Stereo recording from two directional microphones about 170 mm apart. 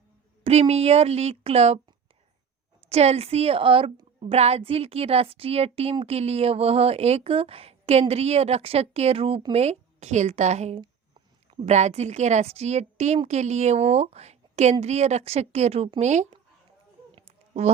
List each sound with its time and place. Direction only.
0.4 s a woman's voice: 35° right (ahead or behind)
2.9 s a woman's voice: 40° right (ahead or behind)
17.2 s a sound: 40° right (ahead or behind)